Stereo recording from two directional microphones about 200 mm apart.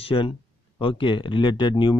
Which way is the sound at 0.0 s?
25° left (ahead or behind).